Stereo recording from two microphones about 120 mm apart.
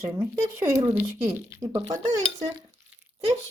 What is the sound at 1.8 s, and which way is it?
Dishes, 30° right (ahead or behind).